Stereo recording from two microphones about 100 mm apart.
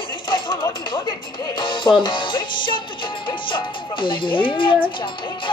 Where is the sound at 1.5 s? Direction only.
55° left (ahead or behind).